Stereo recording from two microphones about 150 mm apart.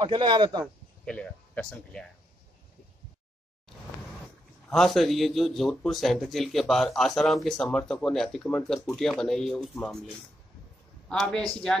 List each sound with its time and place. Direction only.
0.0 s a man's voice: 35° right (ahead or behind)
1.0 s speech: 5° left (ahead or behind)
4.6 s speech: centre (ahead or behind)
11.1 s speech: 5° left (ahead or behind)